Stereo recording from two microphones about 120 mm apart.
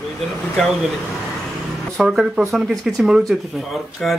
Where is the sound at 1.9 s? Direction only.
5° right (ahead or behind).